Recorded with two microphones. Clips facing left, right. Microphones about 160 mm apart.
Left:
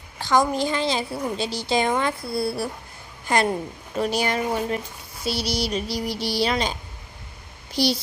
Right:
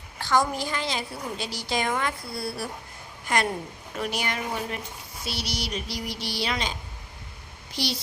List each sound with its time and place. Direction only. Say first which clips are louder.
0.2 s a woman's voice: left 4 dB; 15° left (ahead or behind)
3.9 s speech: left 7 dB; 35° left (ahead or behind)
7.8 s speech: left 8 dB; 35° left (ahead or behind)